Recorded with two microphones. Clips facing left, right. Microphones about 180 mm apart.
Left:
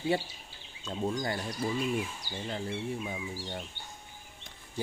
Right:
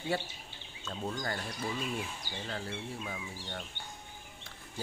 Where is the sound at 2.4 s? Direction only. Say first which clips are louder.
Left 5 dB; 15° left (ahead or behind).